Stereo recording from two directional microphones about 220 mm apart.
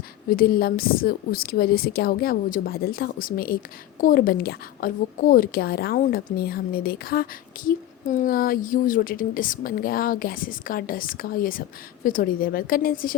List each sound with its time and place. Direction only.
0.3 s a woman's voice: 40° left (ahead or behind)